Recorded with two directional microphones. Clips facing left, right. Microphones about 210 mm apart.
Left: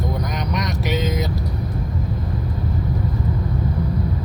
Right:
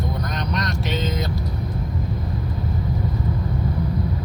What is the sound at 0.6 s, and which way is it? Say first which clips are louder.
Vehicle: left 4 dB; 15° left (ahead or behind).